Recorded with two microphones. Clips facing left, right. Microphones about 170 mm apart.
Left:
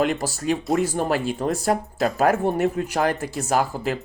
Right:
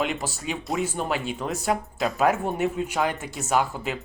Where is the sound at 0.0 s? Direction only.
40° left (ahead or behind).